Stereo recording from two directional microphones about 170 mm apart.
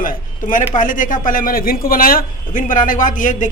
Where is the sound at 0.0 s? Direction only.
50° left (ahead or behind).